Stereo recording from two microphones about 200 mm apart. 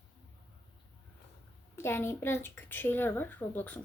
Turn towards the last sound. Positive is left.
turn(degrees=10)  # may be behind; listen again after turning